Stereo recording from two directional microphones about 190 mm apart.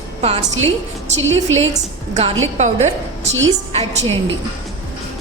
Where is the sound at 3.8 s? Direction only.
35° right (ahead or behind).